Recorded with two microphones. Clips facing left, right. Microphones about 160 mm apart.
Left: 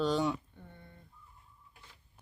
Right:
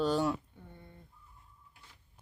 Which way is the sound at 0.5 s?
10° right (ahead or behind).